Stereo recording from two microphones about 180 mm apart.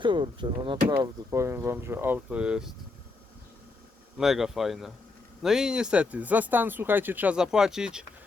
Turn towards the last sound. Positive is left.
turn(degrees=-5)  # may be behind; listen again after turning